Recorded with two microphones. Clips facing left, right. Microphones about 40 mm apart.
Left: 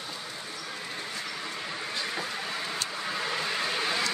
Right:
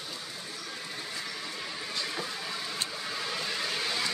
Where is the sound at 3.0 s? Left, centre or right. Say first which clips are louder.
Left 4 dB; left.